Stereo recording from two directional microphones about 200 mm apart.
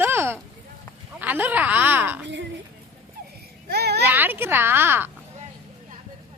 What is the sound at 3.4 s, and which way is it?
Children playing, 50° right (ahead or behind).